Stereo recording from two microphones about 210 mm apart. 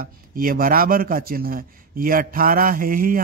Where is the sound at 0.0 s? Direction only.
45° right (ahead or behind).